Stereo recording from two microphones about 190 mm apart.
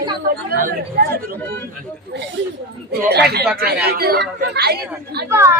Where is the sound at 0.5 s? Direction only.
50° right (ahead or behind).